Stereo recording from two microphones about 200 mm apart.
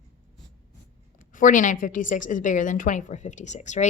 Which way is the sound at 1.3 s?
40° left (ahead or behind).